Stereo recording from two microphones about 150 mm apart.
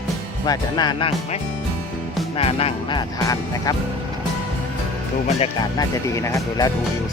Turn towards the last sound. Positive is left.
turn(degrees=20)  # may be behind; listen again after turning